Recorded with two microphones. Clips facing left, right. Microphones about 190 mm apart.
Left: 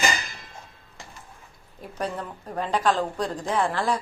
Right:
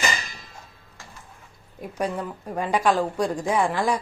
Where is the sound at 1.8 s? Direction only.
10° right (ahead or behind).